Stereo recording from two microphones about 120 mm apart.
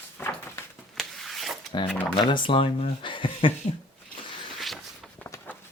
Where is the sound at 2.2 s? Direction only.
40° left (ahead or behind).